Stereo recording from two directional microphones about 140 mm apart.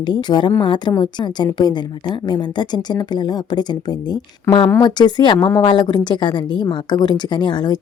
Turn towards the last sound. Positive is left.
turn(degrees=30)  # may be behind; listen again after turning